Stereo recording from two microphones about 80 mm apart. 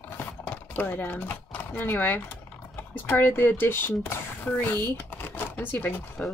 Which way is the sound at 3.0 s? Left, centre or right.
Left.